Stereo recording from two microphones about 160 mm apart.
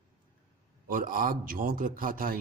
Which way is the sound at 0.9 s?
60° right (ahead or behind).